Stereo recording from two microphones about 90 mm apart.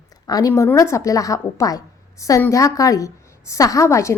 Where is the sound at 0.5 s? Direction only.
30° left (ahead or behind).